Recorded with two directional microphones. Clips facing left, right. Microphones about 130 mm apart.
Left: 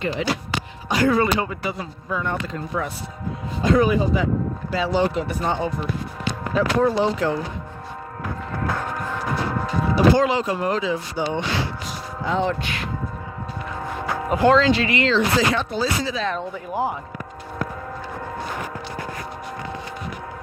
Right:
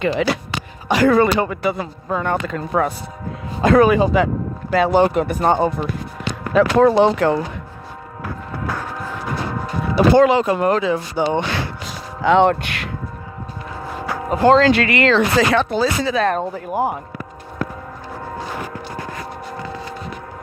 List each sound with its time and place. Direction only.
0.0 s speech: 75° right (ahead or behind)
4.7 s speech: 55° right (ahead or behind)
6.5 s speech: 75° right (ahead or behind)
10.2 s speech: 60° right (ahead or behind)
12.2 s speech: 80° right
14.3 s speech: 35° right (ahead or behind)
14.6 s speech: 65° right (ahead or behind)